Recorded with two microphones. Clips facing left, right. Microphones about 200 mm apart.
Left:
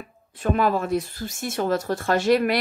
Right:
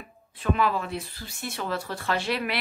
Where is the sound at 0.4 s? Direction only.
45° left (ahead or behind).